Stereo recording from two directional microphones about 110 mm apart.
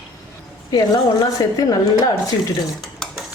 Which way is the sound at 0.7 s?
35° left (ahead or behind).